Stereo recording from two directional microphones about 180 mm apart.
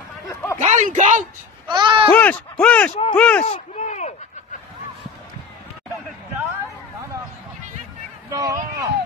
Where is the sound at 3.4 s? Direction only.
40° left (ahead or behind).